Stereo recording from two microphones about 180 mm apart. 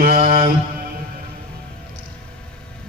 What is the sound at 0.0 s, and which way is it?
Mantra, 55° right (ahead or behind).